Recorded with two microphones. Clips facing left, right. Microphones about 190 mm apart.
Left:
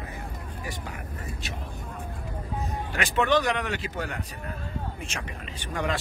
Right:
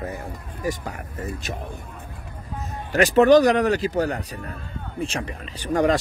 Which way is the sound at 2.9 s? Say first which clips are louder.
Right 11 dB; 40° right (ahead or behind).